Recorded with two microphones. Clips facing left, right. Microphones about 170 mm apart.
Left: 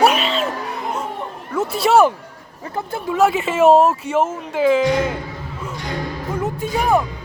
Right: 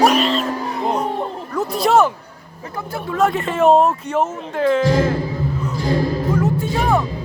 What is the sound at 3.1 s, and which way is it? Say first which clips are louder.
Speech: left 2 dB; 5° left (ahead or behind).